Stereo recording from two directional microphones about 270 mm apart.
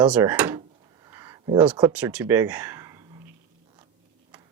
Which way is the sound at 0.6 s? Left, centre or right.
Centre.